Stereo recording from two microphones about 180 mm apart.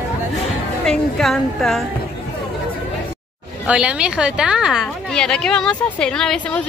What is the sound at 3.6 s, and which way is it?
A woman's voice, 5° right (ahead or behind).